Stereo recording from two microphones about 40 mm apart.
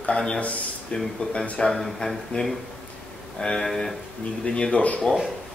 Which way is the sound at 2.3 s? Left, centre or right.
Left.